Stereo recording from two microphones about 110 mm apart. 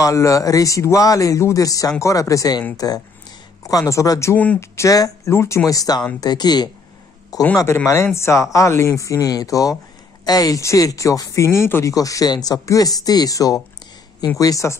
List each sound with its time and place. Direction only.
0.0 s speech: 30° left (ahead or behind)
7.5 s speech: 25° left (ahead or behind)